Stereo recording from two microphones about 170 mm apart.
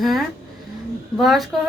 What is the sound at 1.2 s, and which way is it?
Speech, centre (ahead or behind).